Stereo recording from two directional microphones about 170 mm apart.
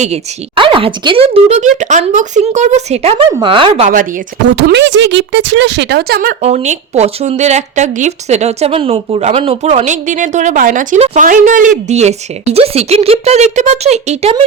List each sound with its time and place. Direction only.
0.0 s speech: 35° right (ahead or behind)
3.8 s speech: 50° right (ahead or behind)
4.5 s speech: 90° right; by 6.3 s 60° right (ahead or behind)
6.4 s speech: 40° right (ahead or behind)
11.9 s speech: 40° right (ahead or behind)